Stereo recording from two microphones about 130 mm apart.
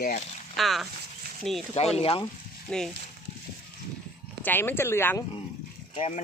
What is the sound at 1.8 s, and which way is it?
Frying, 55° left (ahead or behind).